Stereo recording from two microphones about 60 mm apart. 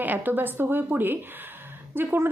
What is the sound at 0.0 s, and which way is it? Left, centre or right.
A woman's voice, right.